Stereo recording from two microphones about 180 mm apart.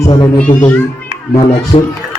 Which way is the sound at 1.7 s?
25° left (ahead or behind).